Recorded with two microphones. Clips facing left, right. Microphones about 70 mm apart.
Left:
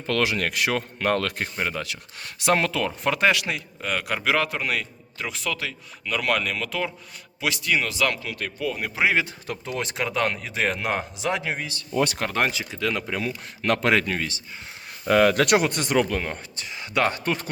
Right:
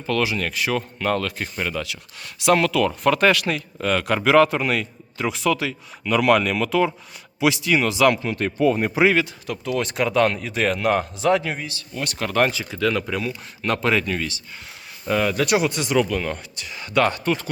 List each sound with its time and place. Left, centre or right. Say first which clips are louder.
0.1 s speech: right 1 dB; left
1.5 s a man's voice: right 2 dB; left; by 8.1 s centre
8.2 s speech: right 9 dB; right
9.1 s a man's voice: right 3 dB; left
13.1 s speech: right 2 dB; left
14.0 s speech: right 2 dB; left
15.0 s speech: left 3 dB; left
16.2 s speech: right 3 dB; left
17.2 s speech: right 3 dB; left